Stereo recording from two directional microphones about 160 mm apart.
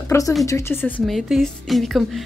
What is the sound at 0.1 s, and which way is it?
A woman's voice, 15° left (ahead or behind).